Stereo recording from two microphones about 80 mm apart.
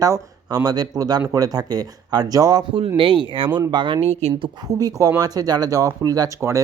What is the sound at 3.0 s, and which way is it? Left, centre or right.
Speech, right.